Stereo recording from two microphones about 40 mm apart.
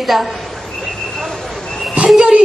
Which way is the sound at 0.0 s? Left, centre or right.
Centre.